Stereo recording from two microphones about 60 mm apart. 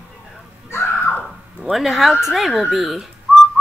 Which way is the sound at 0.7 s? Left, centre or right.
Left.